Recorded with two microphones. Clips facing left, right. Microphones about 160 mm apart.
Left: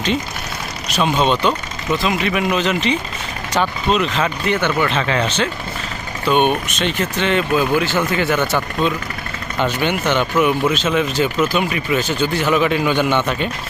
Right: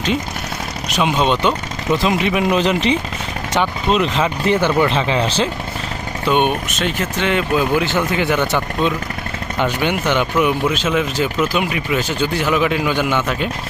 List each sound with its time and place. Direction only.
0.9 s speech: 15° right (ahead or behind)
6.3 s speech: 10° right (ahead or behind)